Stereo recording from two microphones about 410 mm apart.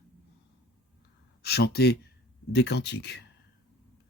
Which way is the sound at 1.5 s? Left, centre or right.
Left.